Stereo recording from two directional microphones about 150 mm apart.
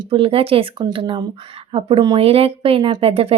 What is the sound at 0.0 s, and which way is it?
Speech, 40° right (ahead or behind).